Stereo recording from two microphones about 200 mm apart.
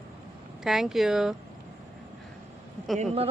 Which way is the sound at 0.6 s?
Centre (ahead or behind).